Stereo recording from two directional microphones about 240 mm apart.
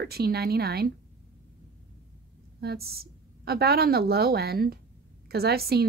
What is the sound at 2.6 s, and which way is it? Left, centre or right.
Speech, right.